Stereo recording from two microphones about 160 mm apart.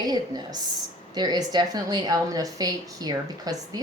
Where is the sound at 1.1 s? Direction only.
25° right (ahead or behind).